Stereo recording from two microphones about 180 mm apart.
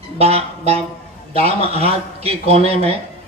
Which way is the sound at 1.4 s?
35° right (ahead or behind).